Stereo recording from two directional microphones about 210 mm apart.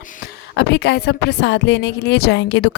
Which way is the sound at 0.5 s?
55° left (ahead or behind).